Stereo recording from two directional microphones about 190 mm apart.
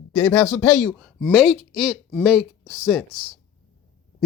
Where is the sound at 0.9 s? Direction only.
Centre (ahead or behind).